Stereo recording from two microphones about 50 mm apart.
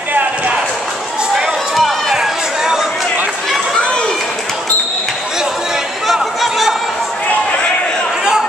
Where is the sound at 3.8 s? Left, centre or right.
Centre.